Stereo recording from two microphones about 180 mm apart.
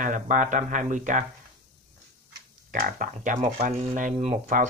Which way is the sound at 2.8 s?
50° right (ahead or behind).